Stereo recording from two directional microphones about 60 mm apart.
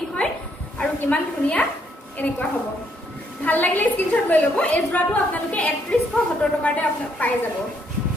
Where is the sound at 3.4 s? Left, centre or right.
Left.